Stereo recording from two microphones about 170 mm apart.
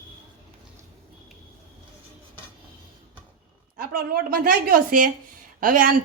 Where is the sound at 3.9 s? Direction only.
60° right (ahead or behind).